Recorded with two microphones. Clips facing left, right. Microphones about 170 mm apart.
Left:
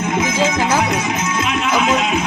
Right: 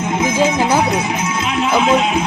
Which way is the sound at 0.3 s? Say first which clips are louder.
Right 4 dB; 15° right (ahead or behind).